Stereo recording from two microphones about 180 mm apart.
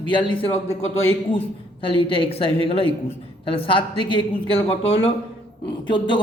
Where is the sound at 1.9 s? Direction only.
30° left (ahead or behind).